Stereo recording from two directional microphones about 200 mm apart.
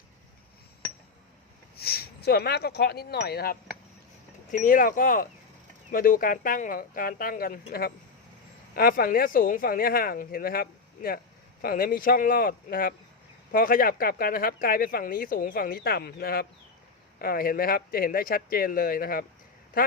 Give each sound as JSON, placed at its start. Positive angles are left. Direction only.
{"t": 1.7, "sound": "speech", "side_deg": 50}